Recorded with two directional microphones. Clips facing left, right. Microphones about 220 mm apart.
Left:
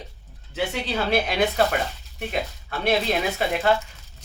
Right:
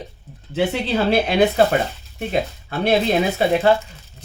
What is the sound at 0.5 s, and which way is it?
Speech, 30° right (ahead or behind).